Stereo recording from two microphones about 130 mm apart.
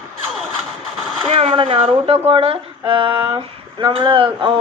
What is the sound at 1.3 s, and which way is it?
Speech, 50° right (ahead or behind).